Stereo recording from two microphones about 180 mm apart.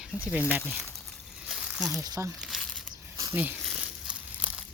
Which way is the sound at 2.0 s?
20° right (ahead or behind).